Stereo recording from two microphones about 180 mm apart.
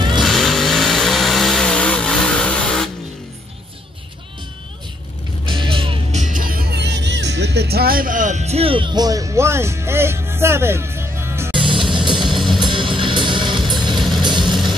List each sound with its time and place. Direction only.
0.2 s vehicle: centre (ahead or behind)
5.5 s music: 30° right (ahead or behind)
6.2 s music: 50° right (ahead or behind); by 11.5 s 15° right (ahead or behind)
11.5 s music: 30° right (ahead or behind)
13.6 s music: centre (ahead or behind)